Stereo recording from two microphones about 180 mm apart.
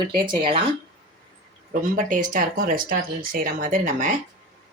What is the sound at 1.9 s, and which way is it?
Speech, 45° right (ahead or behind).